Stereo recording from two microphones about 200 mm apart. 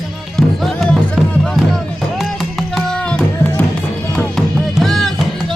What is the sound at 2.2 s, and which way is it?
Music, centre (ahead or behind).